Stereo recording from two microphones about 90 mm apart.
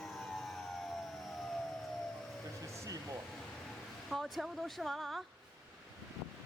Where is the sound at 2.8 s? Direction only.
40° right (ahead or behind).